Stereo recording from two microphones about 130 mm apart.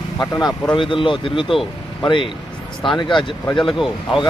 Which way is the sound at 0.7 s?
40° left (ahead or behind).